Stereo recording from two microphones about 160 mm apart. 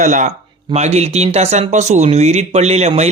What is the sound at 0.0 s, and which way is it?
Speech, 45° right (ahead or behind).